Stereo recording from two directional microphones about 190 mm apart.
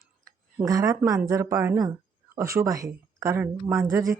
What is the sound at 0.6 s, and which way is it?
Speech, 20° right (ahead or behind).